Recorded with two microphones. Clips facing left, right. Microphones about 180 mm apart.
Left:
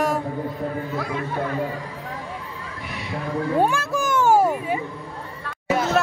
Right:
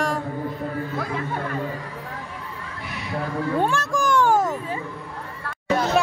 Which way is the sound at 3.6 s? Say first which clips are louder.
Left 2 dB; 10° left (ahead or behind).